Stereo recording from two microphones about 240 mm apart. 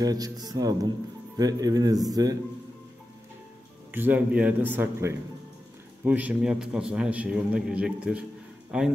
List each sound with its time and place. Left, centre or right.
0.0 s speech: centre
3.9 s a man's voice: centre